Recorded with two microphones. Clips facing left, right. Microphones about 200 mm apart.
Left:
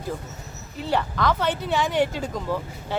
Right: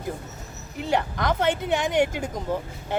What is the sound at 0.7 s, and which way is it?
Speech, 20° right (ahead or behind).